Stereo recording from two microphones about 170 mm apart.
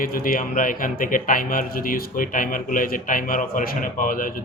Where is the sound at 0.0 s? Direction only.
55° left (ahead or behind).